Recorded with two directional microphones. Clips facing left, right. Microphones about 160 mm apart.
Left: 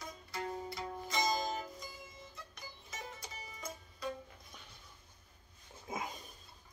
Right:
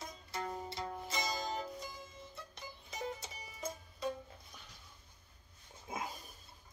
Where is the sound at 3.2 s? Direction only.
25° right (ahead or behind).